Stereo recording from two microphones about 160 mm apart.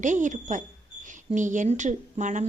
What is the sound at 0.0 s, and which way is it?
A woman's voice, 50° right (ahead or behind).